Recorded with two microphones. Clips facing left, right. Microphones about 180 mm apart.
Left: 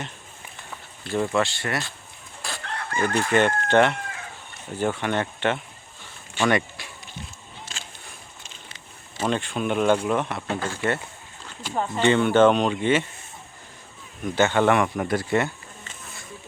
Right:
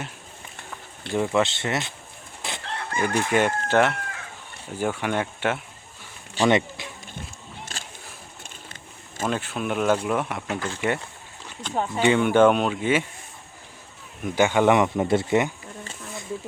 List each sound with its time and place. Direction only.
1.1 s speech: 15° right (ahead or behind)
2.4 s chicken: 20° right (ahead or behind)
3.2 s speech: 10° right (ahead or behind)
6.4 s speech: 35° right (ahead or behind)
6.8 s a sound: 20° right (ahead or behind)
8.4 s a sound: 50° right (ahead or behind)
9.3 s speech: 5° right (ahead or behind)
10.4 s speech: 30° left (ahead or behind)
11.7 s speech: 10° right (ahead or behind)
14.3 s speech: 10° right (ahead or behind)